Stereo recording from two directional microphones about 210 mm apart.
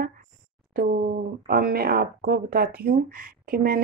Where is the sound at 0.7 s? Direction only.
45° right (ahead or behind).